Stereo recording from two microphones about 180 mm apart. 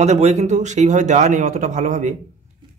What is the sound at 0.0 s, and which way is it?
Speech, 35° right (ahead or behind).